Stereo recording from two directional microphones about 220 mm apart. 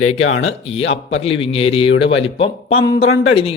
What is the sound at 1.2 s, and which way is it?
A man's voice, 25° left (ahead or behind).